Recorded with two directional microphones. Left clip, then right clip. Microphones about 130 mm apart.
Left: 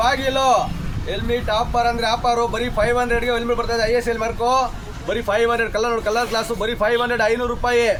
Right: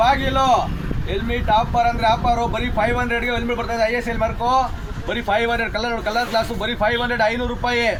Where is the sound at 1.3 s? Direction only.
35° left (ahead or behind); by 7.9 s 55° left (ahead or behind).